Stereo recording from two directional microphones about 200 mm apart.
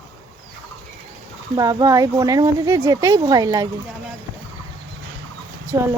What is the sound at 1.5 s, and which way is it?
Speech, 20° right (ahead or behind).